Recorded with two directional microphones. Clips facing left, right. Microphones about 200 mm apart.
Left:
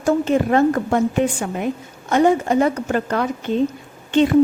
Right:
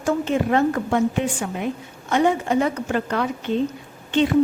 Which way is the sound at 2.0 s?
45° left (ahead or behind).